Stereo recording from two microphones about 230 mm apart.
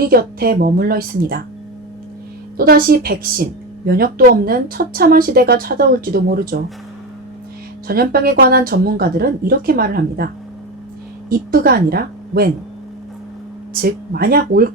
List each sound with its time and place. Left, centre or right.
0.1 s speech: right
2.6 s speech: right
7.9 s speech: right
11.3 s speech: right
13.8 s speech: right